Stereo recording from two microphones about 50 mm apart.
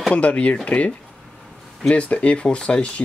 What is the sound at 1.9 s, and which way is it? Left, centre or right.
Speech, left.